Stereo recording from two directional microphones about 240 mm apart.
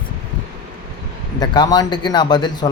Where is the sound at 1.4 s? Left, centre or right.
Centre.